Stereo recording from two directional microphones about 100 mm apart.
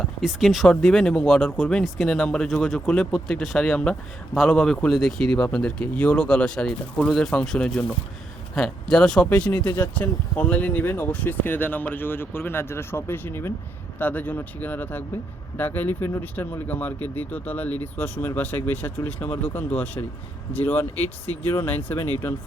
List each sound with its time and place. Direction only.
0.0 s speech: centre (ahead or behind)
9.6 s speech: 20° left (ahead or behind)